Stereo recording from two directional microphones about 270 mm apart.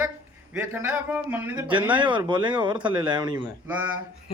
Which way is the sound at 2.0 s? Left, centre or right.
Centre.